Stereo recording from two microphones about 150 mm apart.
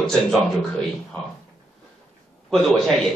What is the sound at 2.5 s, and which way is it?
Speech, 5° left (ahead or behind).